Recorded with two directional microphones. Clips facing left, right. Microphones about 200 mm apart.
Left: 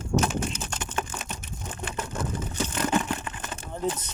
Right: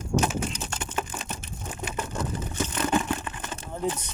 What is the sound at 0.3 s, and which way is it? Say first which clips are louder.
Typing: even; 5° right (ahead or behind).